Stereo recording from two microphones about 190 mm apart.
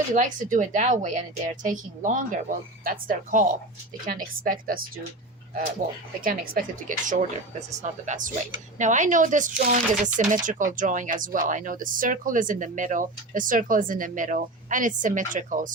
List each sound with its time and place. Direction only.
0.1 s speech: 40° right (ahead or behind)
6.2 s speech: 50° right (ahead or behind)